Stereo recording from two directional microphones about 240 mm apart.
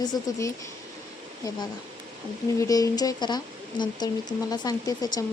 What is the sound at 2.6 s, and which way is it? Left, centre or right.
Speech, centre.